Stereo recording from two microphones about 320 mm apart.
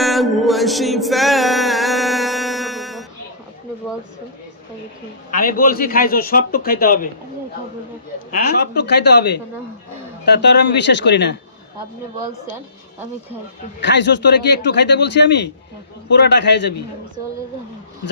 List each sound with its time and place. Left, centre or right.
0.0 s music: centre
5.3 s a man's voice: left
8.3 s speech: left
13.8 s speech: left